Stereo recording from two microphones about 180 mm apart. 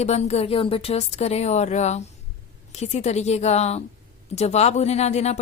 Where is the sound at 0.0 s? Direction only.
35° left (ahead or behind).